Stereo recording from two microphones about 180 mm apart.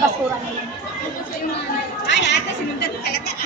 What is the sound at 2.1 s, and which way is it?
Speech, 80° left.